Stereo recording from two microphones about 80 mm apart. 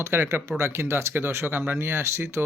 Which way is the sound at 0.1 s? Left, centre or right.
Right.